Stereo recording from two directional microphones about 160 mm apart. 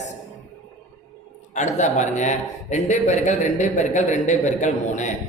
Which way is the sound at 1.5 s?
45° left (ahead or behind).